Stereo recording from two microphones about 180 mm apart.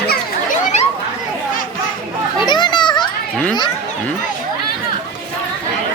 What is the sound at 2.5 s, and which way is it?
Children playing, 25° left (ahead or behind).